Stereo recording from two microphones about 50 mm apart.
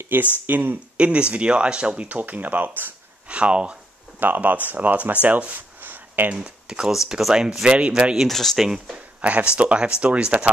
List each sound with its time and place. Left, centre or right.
0.1 s speech: right
0.9 s speech: right
3.3 s speech: right
4.2 s speech: right
6.3 s speech: centre
7.6 s speech: right
8.3 s speech: centre
8.5 s speech: centre